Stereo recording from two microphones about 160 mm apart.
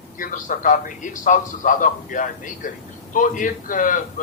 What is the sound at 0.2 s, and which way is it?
A man's voice, 55° left (ahead or behind).